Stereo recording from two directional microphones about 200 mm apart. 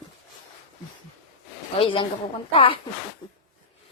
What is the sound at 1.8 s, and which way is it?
Speech, 25° left (ahead or behind).